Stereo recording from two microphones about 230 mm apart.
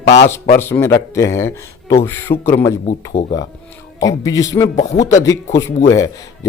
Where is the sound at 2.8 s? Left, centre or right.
Left.